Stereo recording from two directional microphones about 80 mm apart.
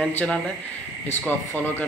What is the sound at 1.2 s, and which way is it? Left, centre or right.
Speech, left.